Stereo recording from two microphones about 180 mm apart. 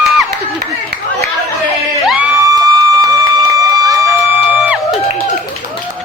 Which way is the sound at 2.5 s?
20° right (ahead or behind).